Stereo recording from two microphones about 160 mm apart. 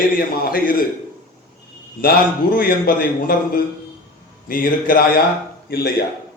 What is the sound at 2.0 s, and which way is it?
A man's voice, 65° left (ahead or behind).